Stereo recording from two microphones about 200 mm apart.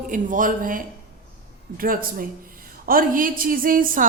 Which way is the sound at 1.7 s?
45° right (ahead or behind).